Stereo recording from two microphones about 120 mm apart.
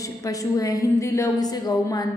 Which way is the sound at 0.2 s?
30° left (ahead or behind).